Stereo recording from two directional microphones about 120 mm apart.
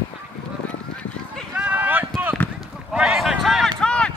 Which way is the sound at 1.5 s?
10° right (ahead or behind).